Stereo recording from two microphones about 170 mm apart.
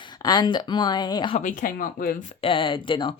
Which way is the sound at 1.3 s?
50° left (ahead or behind).